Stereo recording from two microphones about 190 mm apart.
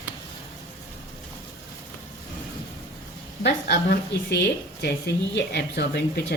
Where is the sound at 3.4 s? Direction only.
60° left (ahead or behind).